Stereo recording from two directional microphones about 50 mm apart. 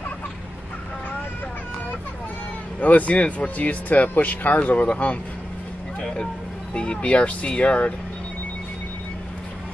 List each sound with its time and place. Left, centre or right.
2.8 s speech: left
6.7 s speech: left